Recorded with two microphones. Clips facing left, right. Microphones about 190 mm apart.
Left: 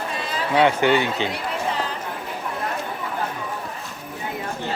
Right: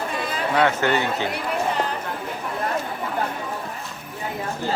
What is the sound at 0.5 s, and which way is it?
Speech, 15° left (ahead or behind).